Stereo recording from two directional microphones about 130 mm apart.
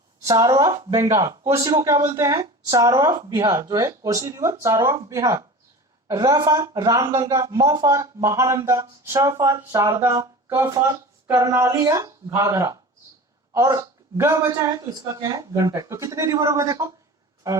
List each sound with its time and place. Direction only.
0.3 s speech: 30° right (ahead or behind)